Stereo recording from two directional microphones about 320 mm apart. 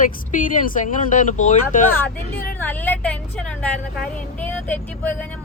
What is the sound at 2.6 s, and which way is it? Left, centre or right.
Speech, centre.